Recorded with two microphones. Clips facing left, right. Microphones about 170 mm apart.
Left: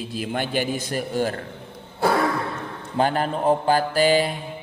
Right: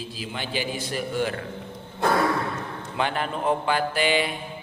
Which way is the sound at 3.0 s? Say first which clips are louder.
Left 5 dB; 40° left (ahead or behind).